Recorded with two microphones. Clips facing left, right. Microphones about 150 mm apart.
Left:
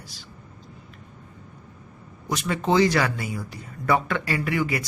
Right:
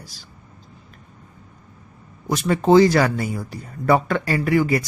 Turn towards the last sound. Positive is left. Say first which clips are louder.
# right 6 dB
turn(degrees=-35)  # may be behind; listen again after turning